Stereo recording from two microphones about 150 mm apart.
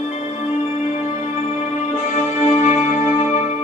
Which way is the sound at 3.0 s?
50° left (ahead or behind).